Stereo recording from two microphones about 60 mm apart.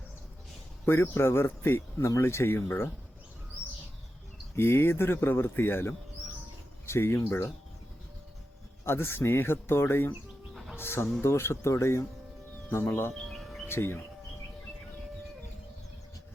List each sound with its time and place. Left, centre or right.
0.9 s speech: left
4.5 s speech: left
8.8 s speech: left
13.3 s a sound: centre
13.7 s speech: left